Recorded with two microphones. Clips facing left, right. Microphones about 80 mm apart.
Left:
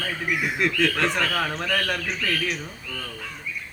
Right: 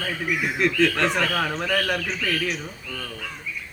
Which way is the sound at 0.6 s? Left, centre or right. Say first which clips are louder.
Right 3 dB; centre.